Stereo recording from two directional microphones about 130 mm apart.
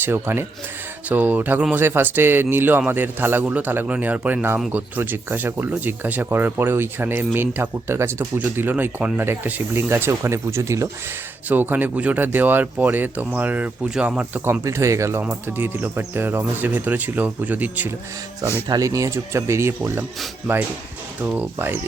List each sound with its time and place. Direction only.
0.0 s speech: 20° right (ahead or behind)
18.7 s speech: 25° right (ahead or behind)
21.2 s speech: 15° right (ahead or behind)